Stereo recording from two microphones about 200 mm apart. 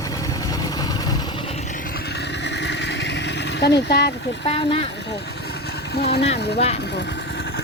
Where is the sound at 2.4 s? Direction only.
60° left (ahead or behind).